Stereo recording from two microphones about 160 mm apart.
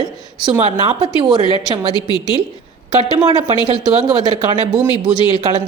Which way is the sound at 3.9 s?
30° right (ahead or behind).